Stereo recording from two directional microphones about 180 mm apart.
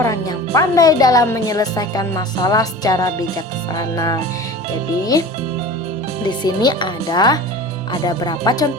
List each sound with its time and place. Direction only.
0.0 s a woman's voice: 20° left (ahead or behind)
6.2 s a woman's voice: 25° left (ahead or behind)